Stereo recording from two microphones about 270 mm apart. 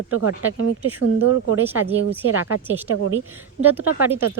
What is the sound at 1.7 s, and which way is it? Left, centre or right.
Speech, centre.